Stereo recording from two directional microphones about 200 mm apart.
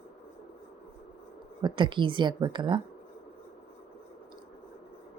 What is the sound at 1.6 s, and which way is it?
A woman's voice, 25° right (ahead or behind).